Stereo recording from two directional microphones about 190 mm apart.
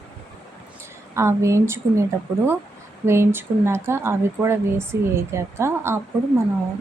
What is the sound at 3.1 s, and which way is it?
Speech, 15° right (ahead or behind).